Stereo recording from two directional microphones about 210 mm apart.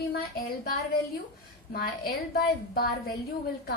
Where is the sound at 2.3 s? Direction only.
45° left (ahead or behind).